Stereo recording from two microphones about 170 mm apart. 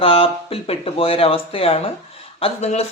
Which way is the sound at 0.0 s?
35° left (ahead or behind).